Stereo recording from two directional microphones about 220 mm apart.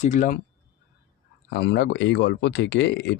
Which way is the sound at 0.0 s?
35° left (ahead or behind).